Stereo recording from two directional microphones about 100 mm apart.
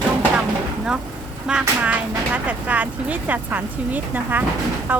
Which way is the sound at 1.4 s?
10° right (ahead or behind).